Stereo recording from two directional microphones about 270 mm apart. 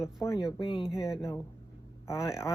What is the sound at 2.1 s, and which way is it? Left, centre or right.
Speech, centre.